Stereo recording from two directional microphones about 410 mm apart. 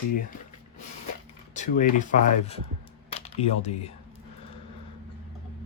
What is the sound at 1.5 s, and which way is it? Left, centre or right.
Speech, centre.